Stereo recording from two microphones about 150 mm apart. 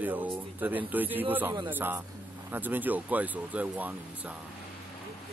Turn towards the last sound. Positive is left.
turn(degrees=-10)  # may be behind; listen again after turning